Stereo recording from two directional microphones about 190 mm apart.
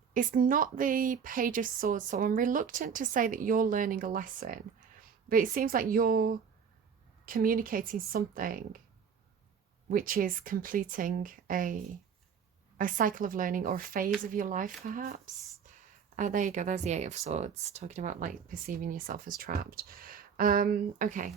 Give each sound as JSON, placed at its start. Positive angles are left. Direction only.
{"t": 0.1, "sound": "speech", "side_deg": -45}
{"t": 9.9, "sound": "speech", "side_deg": -50}
{"t": 16.1, "sound": "speech", "side_deg": -40}